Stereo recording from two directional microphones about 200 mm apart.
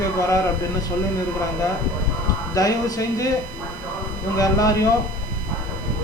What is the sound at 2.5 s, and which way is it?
Speech, 20° left (ahead or behind).